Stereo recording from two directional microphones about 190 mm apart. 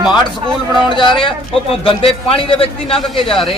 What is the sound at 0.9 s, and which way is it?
A man's voice, 25° left (ahead or behind).